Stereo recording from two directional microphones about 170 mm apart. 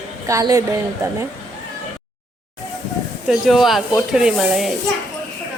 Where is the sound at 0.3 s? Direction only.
20° right (ahead or behind).